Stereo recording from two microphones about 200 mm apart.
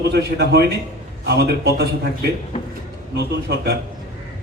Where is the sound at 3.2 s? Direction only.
55° right (ahead or behind).